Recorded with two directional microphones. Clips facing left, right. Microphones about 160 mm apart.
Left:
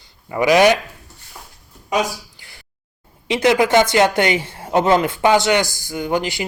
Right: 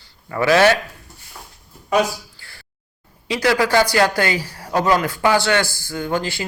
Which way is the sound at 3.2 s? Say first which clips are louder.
Left 3 dB; 20° left (ahead or behind).